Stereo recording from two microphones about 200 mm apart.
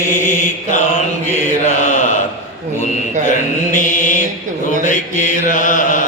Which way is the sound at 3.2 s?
40° left (ahead or behind).